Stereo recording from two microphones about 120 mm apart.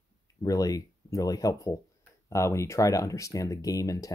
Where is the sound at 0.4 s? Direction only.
30° left (ahead or behind).